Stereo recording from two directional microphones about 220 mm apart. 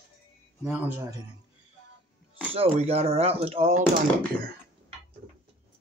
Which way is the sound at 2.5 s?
25° right (ahead or behind).